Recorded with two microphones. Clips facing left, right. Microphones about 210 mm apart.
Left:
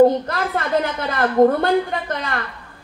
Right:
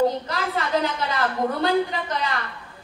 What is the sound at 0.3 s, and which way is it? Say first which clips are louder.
A woman's voice: left 3 dB; 55° left (ahead or behind).